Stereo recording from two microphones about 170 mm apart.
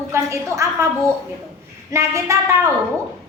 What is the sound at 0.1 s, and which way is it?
A woman's voice, 15° right (ahead or behind).